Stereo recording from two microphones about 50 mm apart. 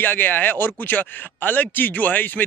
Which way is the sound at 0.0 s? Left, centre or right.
Left.